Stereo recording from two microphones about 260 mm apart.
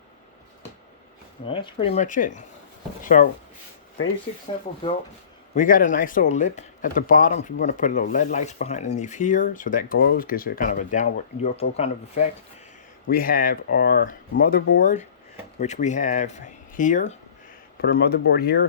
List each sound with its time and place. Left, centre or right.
1.5 s speech: centre
4.8 s speech: centre
5.5 s speech: left